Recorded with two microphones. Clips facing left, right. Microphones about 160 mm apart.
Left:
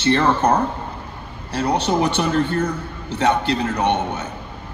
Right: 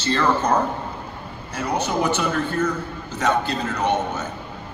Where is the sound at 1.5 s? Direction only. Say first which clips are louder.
Left 4 dB; 70° left (ahead or behind).